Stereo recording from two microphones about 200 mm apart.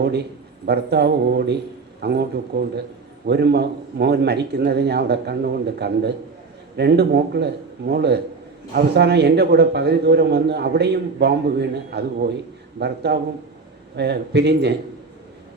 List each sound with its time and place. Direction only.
0.6 s speech: 55° right (ahead or behind)